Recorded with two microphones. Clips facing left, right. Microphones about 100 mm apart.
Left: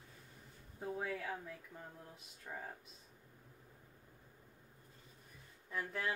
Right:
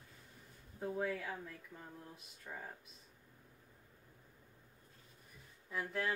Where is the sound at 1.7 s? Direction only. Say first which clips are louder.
Left 1 dB; 15° left (ahead or behind).